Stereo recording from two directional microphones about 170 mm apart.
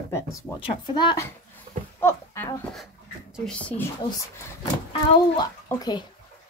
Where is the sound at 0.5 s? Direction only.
30° left (ahead or behind).